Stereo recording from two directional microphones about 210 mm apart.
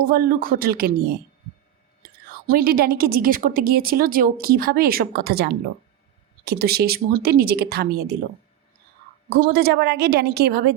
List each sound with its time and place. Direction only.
0.0 s a woman's voice: 45° right (ahead or behind)
2.5 s a woman's voice: 45° right (ahead or behind)
9.3 s a woman's voice: 45° right (ahead or behind)